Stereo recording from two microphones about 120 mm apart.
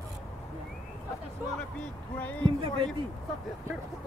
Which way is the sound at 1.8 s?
10° left (ahead or behind).